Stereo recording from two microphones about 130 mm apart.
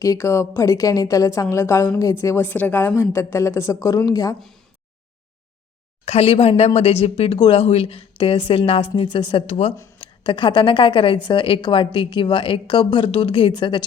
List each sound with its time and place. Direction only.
0.0 s a woman's voice: 25° left (ahead or behind)
4.4 s speech: centre (ahead or behind)
6.1 s speech: 50° left (ahead or behind)
7.3 s a woman's voice: 35° left (ahead or behind)
7.6 s speech: 50° left (ahead or behind)
10.0 s a woman's voice: 40° left (ahead or behind)